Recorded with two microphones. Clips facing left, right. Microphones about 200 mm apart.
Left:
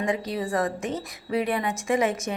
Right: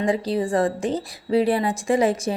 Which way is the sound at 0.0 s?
30° right (ahead or behind).